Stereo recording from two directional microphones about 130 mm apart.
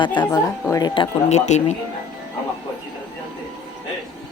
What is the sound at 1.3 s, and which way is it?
Speech, 60° left (ahead or behind).